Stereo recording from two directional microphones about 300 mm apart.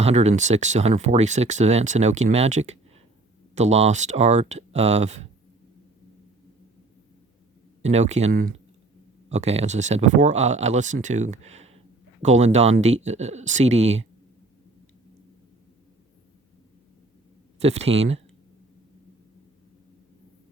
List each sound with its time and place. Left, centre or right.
0.0 s speech: right
7.8 s speech: right
17.6 s speech: right